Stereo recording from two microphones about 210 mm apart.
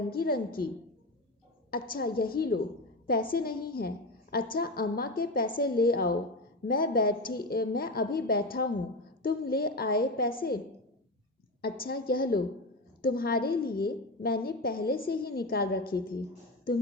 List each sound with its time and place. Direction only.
0.1 s a woman's voice: 45° left (ahead or behind)
1.7 s a woman's voice: 45° left (ahead or behind)
11.6 s a woman's voice: 45° left (ahead or behind)